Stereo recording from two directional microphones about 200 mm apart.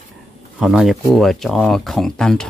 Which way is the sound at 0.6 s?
Centre (ahead or behind).